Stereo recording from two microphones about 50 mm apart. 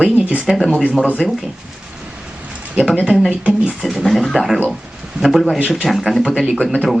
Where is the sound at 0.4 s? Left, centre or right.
Centre.